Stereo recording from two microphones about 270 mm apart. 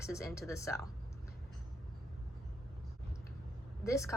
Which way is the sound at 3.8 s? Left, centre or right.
Centre.